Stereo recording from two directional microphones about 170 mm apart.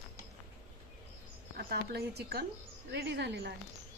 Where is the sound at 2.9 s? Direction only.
90° right.